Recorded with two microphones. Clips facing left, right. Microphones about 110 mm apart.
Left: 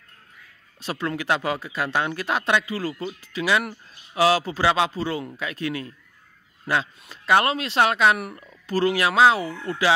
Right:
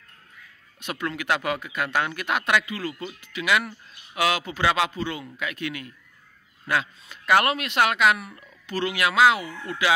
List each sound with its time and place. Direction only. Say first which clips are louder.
0.7 s speech: left 3 dB; 30° left (ahead or behind)